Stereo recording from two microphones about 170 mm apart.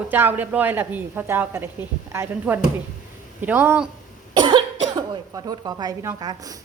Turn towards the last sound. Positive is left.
turn(degrees=-20)  # may be behind; listen again after turning